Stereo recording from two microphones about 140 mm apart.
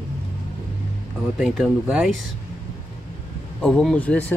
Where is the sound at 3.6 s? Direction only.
5° left (ahead or behind).